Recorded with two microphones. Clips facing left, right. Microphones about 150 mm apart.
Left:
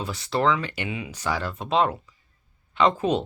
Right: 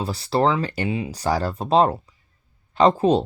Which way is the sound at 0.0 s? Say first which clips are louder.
Right 3 dB; 35° right (ahead or behind).